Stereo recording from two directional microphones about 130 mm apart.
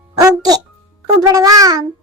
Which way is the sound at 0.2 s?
30° right (ahead or behind).